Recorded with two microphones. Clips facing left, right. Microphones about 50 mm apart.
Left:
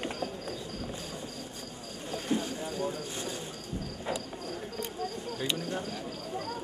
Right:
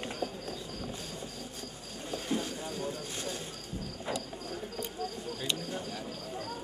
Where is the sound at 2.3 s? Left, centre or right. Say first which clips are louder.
Left 3 dB; centre.